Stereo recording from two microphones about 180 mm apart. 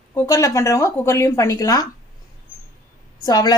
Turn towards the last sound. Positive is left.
turn(degrees=20)  # may be behind; listen again after turning